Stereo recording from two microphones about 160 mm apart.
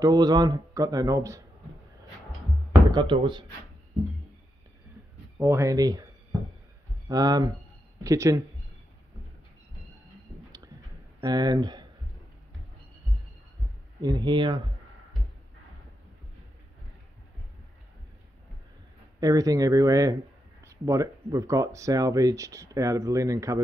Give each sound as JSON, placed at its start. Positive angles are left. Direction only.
{"t": 0.0, "sound": "speech", "side_deg": -25}
{"t": 2.9, "sound": "speech", "side_deg": -30}
{"t": 5.4, "sound": "speech", "side_deg": -20}
{"t": 7.1, "sound": "speech", "side_deg": -25}
{"t": 11.1, "sound": "speech", "side_deg": -25}
{"t": 14.0, "sound": "speech", "side_deg": -25}
{"t": 19.1, "sound": "speech", "side_deg": -20}